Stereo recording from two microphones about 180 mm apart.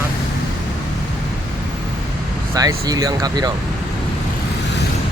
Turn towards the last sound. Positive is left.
turn(degrees=-20)  # may be behind; listen again after turning